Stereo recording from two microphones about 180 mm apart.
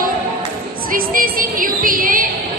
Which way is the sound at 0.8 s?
50° right (ahead or behind).